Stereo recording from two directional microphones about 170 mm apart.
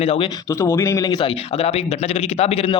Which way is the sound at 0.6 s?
15° left (ahead or behind).